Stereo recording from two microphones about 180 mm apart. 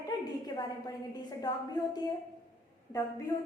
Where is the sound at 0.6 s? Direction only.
20° left (ahead or behind).